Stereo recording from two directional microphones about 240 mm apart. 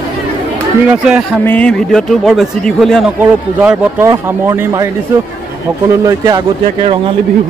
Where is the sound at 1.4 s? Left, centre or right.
Centre.